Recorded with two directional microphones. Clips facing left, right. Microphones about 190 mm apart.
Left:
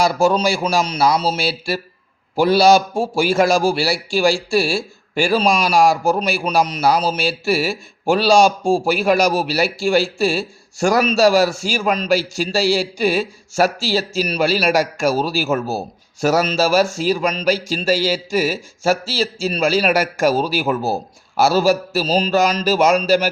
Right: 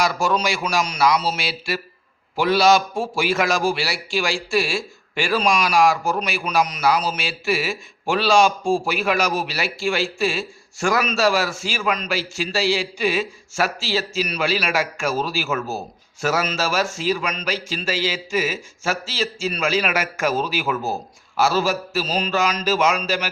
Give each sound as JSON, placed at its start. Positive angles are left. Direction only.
{"t": 0.0, "sound": "a man's voice", "side_deg": 35}